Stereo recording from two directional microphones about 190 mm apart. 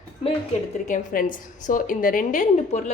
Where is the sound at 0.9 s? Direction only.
45° left (ahead or behind).